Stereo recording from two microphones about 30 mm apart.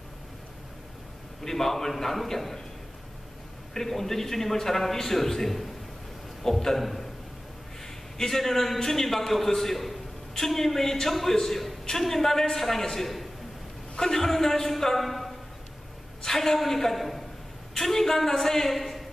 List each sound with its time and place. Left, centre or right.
1.4 s a man's voice: centre
3.7 s a man's voice: centre
6.8 s a sound: centre
8.2 s a man's voice: centre
13.9 s a man's voice: centre